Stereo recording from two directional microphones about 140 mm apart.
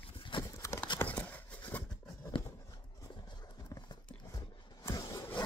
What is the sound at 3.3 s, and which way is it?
Clip-clop, 30° left (ahead or behind).